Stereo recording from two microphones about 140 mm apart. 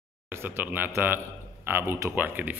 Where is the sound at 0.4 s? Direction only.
15° right (ahead or behind).